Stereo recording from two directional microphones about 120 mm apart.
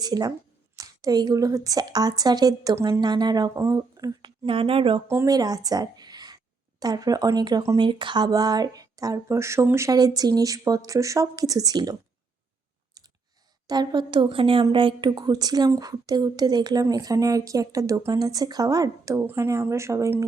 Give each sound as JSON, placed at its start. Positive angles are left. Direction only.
{"t": 0.0, "sound": "speech", "side_deg": -35}
{"t": 4.4, "sound": "a woman's voice", "side_deg": -50}
{"t": 5.0, "sound": "speech", "side_deg": -20}
{"t": 5.3, "sound": "a woman's voice", "side_deg": -30}
{"t": 13.0, "sound": "clicking", "side_deg": -35}
{"t": 13.7, "sound": "speech", "side_deg": -35}